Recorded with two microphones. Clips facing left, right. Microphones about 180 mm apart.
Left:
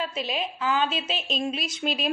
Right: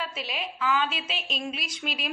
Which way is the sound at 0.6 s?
30° left (ahead or behind).